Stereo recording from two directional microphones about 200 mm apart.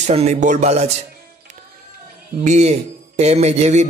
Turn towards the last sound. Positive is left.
turn(degrees=-35)  # may be behind; listen again after turning